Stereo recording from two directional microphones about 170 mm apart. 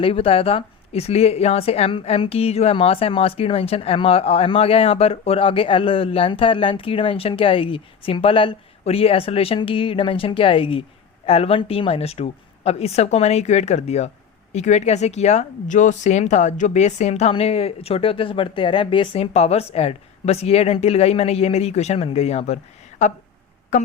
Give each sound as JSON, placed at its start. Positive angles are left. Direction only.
{"t": 0.0, "sound": "speech", "side_deg": 35}